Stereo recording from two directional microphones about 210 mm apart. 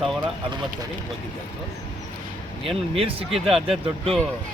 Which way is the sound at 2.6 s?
25° right (ahead or behind).